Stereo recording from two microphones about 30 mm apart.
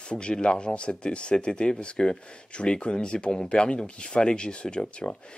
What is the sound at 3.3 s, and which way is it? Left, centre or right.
Speech, left.